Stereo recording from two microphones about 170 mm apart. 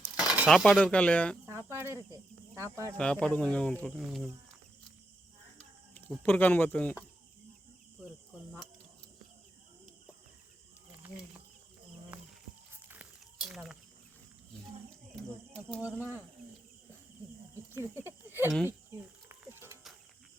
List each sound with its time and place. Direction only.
0.2 s speech: 5° right (ahead or behind)
0.9 s speech: 10° left (ahead or behind)
1.5 s cricket: 15° right (ahead or behind)
2.6 s speech: 20° right (ahead or behind)
3.0 s speech: 5° left (ahead or behind)
6.2 s speech: 10° left (ahead or behind)
10.9 s a sound: 10° right (ahead or behind)
12.7 s a sound: 10° right (ahead or behind)
15.9 s speech: 10° right (ahead or behind)
17.5 s cricket: 15° right (ahead or behind)